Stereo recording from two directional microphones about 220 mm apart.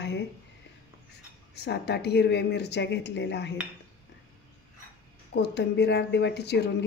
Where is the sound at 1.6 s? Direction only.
50° left (ahead or behind).